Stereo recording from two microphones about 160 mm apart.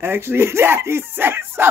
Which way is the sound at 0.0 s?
15° right (ahead or behind).